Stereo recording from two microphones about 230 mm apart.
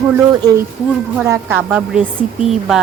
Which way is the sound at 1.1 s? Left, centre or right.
Centre.